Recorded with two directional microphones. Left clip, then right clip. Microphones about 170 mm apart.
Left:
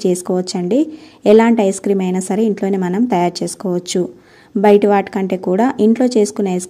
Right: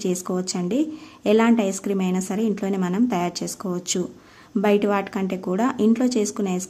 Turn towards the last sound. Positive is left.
turn(degrees=25)  # may be behind; listen again after turning